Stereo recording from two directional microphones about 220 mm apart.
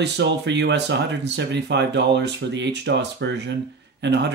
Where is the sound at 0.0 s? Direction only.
50° right (ahead or behind).